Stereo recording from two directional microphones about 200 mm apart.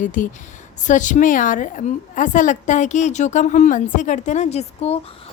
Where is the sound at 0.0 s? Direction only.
40° left (ahead or behind).